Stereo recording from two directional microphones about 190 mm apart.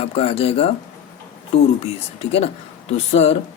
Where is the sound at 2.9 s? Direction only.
35° left (ahead or behind).